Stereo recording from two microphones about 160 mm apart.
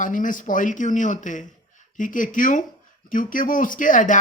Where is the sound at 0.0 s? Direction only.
55° left (ahead or behind).